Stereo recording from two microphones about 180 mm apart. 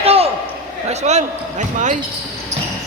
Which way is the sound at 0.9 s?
40° right (ahead or behind).